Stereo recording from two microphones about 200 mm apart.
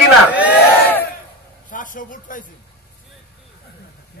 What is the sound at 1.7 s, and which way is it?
Speech, 40° left (ahead or behind).